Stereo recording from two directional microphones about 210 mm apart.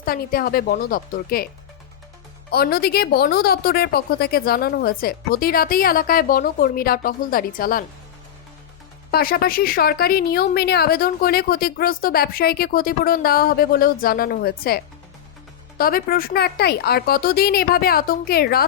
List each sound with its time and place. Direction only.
0.0 s speech: 45° left (ahead or behind)
2.5 s speech: 50° left (ahead or behind)
9.1 s speech: 45° left (ahead or behind)
15.8 s speech: 45° left (ahead or behind)